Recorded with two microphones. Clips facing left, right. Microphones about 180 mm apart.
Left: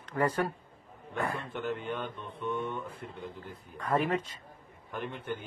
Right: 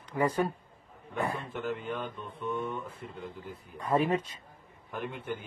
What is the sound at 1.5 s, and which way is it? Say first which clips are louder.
Speech: even; centre (ahead or behind).